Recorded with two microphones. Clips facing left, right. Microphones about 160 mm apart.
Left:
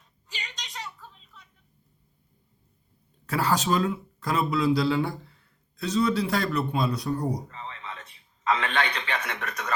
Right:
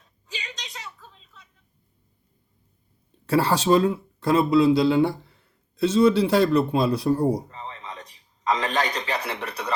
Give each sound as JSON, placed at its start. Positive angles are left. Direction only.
{"t": 3.2, "sound": "speech", "side_deg": -30}